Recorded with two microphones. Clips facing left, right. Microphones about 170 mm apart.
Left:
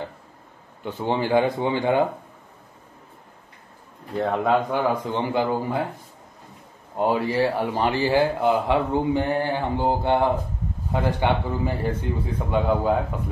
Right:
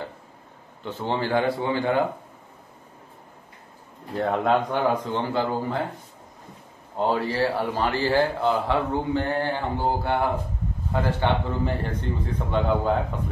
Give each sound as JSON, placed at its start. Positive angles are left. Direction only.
{"t": 0.8, "sound": "a man's voice", "side_deg": 15}
{"t": 4.2, "sound": "speech", "side_deg": 0}
{"t": 5.0, "sound": "a man's voice", "side_deg": 15}
{"t": 7.0, "sound": "a man's voice", "side_deg": 15}